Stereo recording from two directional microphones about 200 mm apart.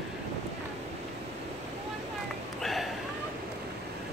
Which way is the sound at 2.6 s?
Centre (ahead or behind).